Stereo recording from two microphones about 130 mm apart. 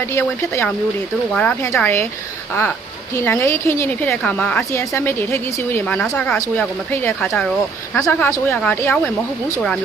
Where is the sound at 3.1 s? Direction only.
15° left (ahead or behind).